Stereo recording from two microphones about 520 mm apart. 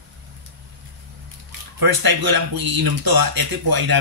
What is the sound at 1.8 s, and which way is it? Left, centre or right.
Speech, right.